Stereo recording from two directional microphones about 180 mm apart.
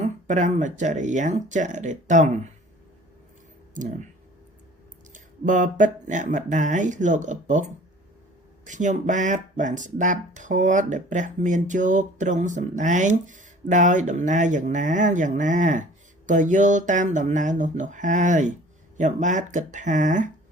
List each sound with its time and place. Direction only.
0.0 s speech: 45° right (ahead or behind)
5.1 s speech: 45° right (ahead or behind)
8.6 s speech: 45° right (ahead or behind)